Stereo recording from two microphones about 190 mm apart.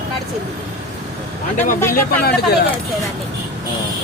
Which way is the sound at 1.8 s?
15° left (ahead or behind).